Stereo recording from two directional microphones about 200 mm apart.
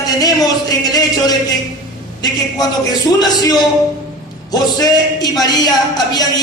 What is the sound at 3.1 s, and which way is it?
A man's voice, 20° left (ahead or behind).